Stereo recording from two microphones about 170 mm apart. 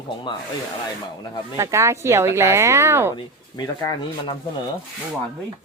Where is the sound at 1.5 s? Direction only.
20° right (ahead or behind).